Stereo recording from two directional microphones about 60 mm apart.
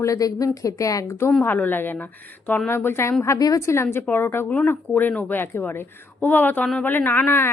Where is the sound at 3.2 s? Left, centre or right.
Left.